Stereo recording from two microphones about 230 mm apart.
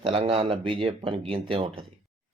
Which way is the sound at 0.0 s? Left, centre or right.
Right.